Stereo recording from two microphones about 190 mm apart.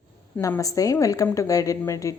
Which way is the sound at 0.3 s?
15° left (ahead or behind).